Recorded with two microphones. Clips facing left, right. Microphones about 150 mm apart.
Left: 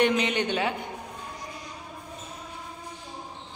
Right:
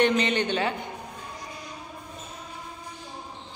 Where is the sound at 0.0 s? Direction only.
10° left (ahead or behind).